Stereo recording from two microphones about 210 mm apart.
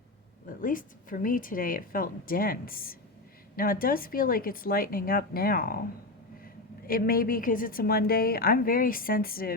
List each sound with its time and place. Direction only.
0.4 s a woman's voice: 40° left (ahead or behind)